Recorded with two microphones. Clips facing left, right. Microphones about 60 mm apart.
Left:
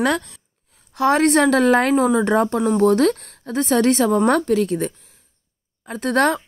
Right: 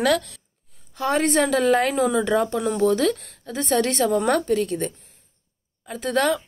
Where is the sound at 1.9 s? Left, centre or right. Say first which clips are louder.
Left 4 dB; left.